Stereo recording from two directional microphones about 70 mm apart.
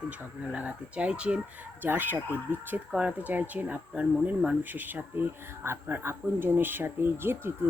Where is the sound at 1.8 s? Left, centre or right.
Right.